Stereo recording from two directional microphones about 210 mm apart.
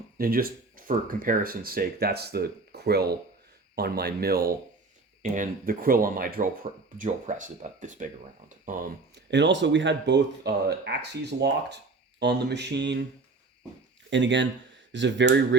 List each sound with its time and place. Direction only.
0.2 s speech: 45° right (ahead or behind)
5.2 s speech: 40° right (ahead or behind)
9.3 s speech: 60° right (ahead or behind)
14.1 s speech: 60° right (ahead or behind)